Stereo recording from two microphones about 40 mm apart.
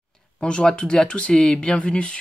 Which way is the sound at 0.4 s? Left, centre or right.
Left.